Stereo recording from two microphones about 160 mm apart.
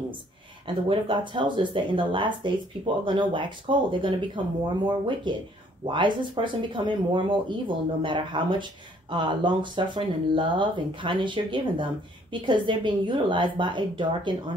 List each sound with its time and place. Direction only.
0.8 s speech: 30° right (ahead or behind)